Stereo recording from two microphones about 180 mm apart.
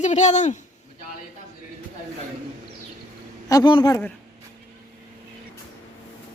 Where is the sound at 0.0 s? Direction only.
40° left (ahead or behind).